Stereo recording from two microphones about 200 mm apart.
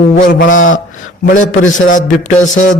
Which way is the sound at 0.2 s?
40° left (ahead or behind).